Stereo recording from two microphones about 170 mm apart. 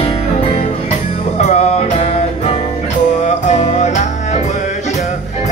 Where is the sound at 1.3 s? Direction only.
40° left (ahead or behind).